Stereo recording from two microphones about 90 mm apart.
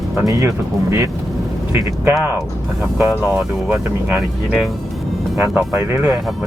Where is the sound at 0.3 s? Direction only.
35° right (ahead or behind).